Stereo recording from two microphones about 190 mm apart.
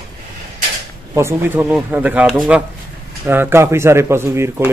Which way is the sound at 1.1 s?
10° right (ahead or behind).